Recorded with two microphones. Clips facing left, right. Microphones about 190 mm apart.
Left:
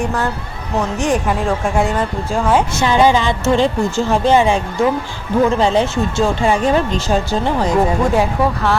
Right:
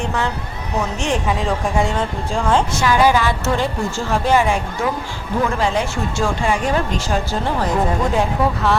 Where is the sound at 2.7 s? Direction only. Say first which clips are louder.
Left 2 dB; 25° left (ahead or behind).